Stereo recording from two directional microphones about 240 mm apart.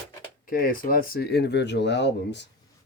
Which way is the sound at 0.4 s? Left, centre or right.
Left.